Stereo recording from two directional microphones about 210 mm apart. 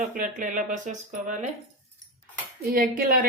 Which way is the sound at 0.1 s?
40° right (ahead or behind).